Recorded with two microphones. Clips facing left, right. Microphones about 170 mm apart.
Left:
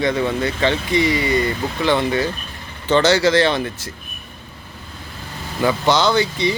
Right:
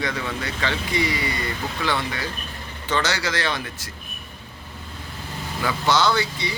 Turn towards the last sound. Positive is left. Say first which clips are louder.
# left 6 dB
turn(degrees=20)  # may be behind; listen again after turning